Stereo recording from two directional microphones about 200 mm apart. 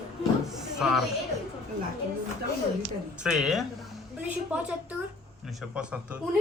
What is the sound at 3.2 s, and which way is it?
Speech, centre (ahead or behind).